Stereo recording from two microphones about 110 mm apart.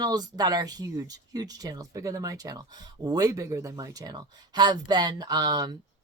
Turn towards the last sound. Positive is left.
turn(degrees=-40)  # may be behind; listen again after turning